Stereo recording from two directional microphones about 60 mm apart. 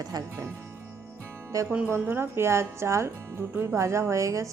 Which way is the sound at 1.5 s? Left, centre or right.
Right.